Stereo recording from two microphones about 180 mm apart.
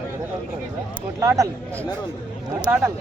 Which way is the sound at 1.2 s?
15° right (ahead or behind).